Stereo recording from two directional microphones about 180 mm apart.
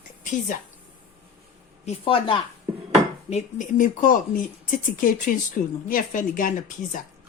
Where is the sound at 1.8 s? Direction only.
30° left (ahead or behind).